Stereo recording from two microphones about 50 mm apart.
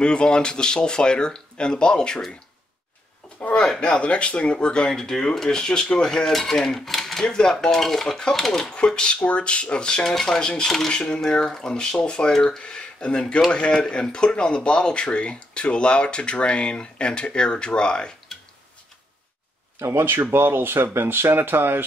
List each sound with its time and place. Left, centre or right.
0.0 s speech: centre
3.4 s speech: centre
19.8 s speech: right